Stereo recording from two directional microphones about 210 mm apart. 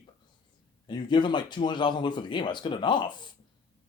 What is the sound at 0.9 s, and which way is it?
Speech, 20° left (ahead or behind).